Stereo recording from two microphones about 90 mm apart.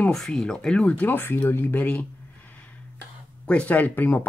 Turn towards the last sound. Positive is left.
turn(degrees=20)  # may be behind; listen again after turning